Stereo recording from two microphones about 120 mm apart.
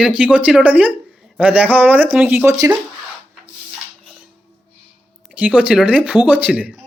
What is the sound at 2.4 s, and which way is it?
Speech, 25° right (ahead or behind).